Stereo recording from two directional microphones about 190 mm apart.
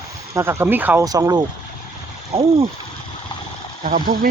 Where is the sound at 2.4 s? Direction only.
30° right (ahead or behind).